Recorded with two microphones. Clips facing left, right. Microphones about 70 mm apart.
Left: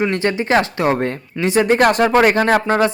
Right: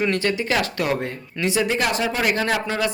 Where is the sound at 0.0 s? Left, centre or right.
Left.